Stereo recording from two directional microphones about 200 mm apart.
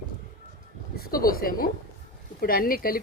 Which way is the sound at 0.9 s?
45° left (ahead or behind).